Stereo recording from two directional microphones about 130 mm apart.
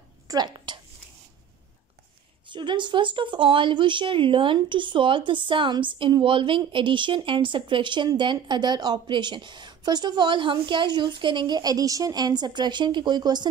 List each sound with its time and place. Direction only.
0.3 s a woman's voice: 30° right (ahead or behind)
2.5 s speech: 40° right (ahead or behind)